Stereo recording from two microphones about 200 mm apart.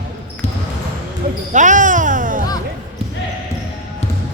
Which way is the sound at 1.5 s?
40° right (ahead or behind).